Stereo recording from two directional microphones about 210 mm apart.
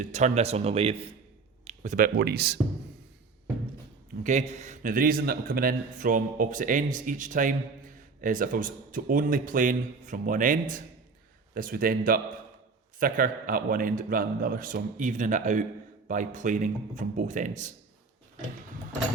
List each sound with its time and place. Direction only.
0.0 s speech: 35° right (ahead or behind); by 2.6 s 50° right (ahead or behind)
4.2 s a man's voice: 35° right (ahead or behind)